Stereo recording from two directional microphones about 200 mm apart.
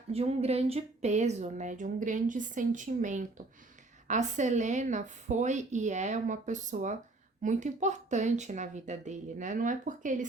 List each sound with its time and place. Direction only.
0.1 s speech: 30° right (ahead or behind)